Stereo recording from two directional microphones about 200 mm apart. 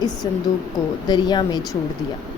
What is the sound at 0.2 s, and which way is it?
A woman's voice, 20° left (ahead or behind).